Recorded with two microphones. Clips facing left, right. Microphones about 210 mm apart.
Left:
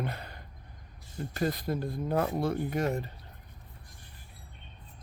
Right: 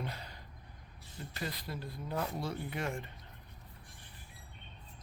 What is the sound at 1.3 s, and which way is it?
Speech, 45° left (ahead or behind).